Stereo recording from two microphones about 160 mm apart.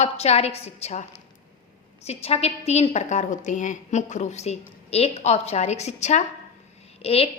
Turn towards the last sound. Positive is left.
turn(degrees=35)  # may be behind; listen again after turning